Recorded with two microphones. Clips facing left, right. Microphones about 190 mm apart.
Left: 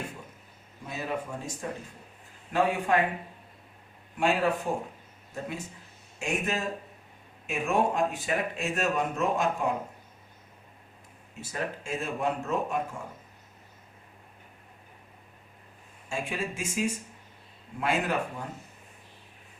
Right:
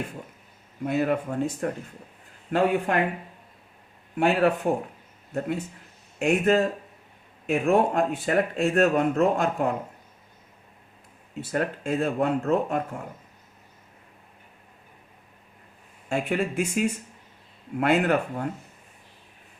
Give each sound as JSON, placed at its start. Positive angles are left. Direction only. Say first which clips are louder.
{"t": 0.9, "sound": "speech", "louder": "right 9 dB", "side_deg": -60}
{"t": 4.2, "sound": "speech", "louder": "right 5 dB", "side_deg": -60}
{"t": 11.3, "sound": "speech", "louder": "right 7 dB", "side_deg": -60}
{"t": 16.0, "sound": "speech", "louder": "right 7 dB", "side_deg": -60}